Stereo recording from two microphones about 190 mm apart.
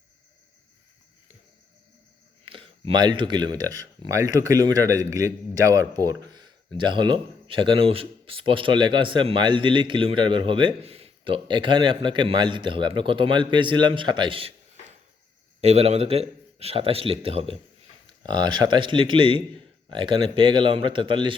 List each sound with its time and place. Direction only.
2.4 s a man's voice: 30° right (ahead or behind)
15.6 s a man's voice: 35° right (ahead or behind)